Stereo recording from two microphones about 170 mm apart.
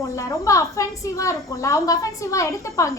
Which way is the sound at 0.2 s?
20° left (ahead or behind).